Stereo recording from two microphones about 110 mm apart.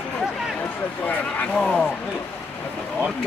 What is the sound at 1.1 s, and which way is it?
Speech, 10° left (ahead or behind).